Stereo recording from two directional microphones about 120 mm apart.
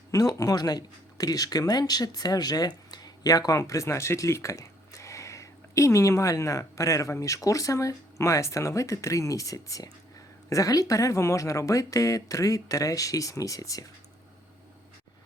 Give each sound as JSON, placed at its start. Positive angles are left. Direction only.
{"t": 0.1, "sound": "speech", "side_deg": 30}